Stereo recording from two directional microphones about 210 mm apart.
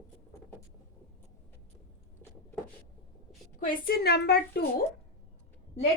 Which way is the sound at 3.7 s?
45° left (ahead or behind).